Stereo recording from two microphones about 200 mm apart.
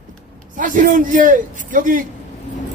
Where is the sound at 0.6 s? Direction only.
40° right (ahead or behind).